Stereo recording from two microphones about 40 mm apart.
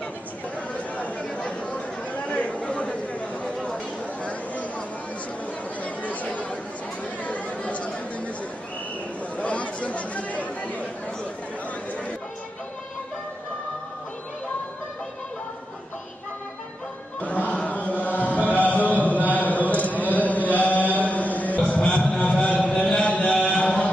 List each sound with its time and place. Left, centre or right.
0.7 s chatter: left
3.6 s chatter: left
4.3 s a sound: left
5.8 s chatter: left
9.4 s chatter: left
17.2 s chant: left
21.0 s a sound: left
23.0 s mantra: left
23.4 s a sound: left